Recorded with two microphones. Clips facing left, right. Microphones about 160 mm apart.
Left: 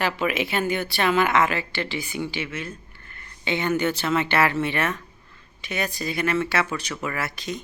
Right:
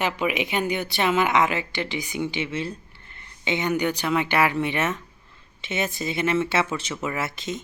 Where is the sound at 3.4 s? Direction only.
20° right (ahead or behind).